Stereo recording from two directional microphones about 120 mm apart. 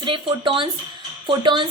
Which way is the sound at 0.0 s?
45° right (ahead or behind).